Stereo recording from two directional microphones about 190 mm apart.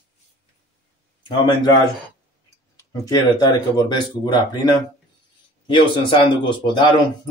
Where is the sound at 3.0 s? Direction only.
20° left (ahead or behind).